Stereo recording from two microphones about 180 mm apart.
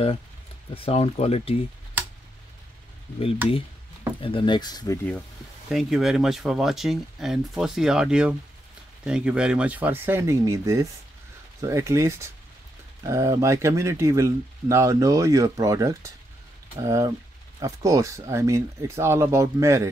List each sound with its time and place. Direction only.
0.7 s speech: 35° left (ahead or behind)
3.2 s speech: 30° left (ahead or behind)
5.7 s speech: centre (ahead or behind)